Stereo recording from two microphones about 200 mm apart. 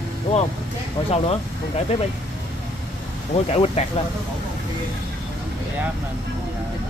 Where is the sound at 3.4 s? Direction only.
30° left (ahead or behind).